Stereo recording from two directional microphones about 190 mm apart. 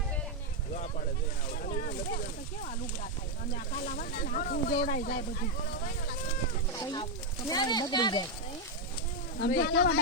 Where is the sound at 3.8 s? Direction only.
45° left (ahead or behind).